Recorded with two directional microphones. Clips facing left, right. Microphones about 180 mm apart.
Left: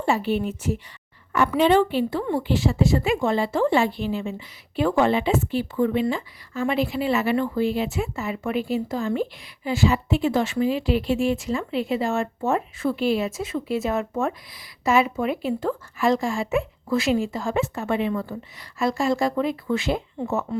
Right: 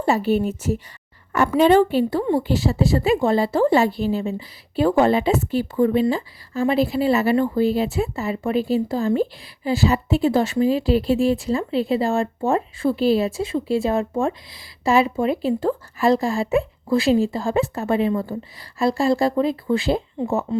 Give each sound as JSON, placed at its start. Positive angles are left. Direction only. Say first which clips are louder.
{"t": 0.0, "sound": "speech", "louder": "right 4 dB", "side_deg": -40}